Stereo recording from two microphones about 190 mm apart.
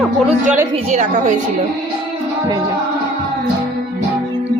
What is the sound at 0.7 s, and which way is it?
Speech, 40° right (ahead or behind).